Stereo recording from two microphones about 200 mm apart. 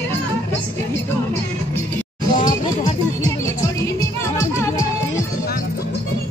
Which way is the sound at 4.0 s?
15° left (ahead or behind).